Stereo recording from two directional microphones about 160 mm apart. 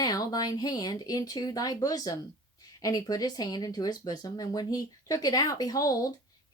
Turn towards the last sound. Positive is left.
turn(degrees=20)  # may be behind; listen again after turning